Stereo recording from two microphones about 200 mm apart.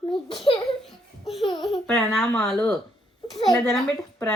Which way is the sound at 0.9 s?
Centre (ahead or behind).